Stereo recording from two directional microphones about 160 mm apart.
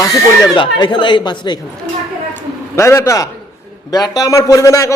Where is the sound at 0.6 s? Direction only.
30° left (ahead or behind).